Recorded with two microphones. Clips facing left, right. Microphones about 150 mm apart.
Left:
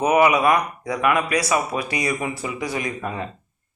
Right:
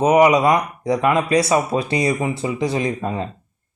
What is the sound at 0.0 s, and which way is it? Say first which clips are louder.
A man's voice: right 3 dB; 20° right (ahead or behind).